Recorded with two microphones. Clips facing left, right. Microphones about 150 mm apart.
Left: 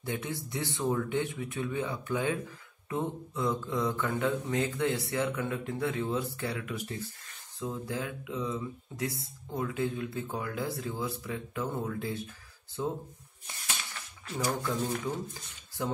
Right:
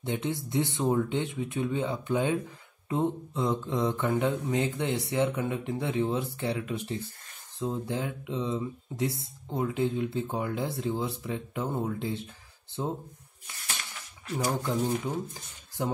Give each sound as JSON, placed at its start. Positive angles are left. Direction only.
{"t": 0.0, "sound": "speech", "side_deg": -25}
{"t": 14.4, "sound": "speech", "side_deg": -25}